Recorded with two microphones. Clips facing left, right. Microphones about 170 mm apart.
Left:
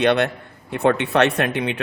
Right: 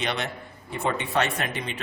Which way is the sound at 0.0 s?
65° left (ahead or behind).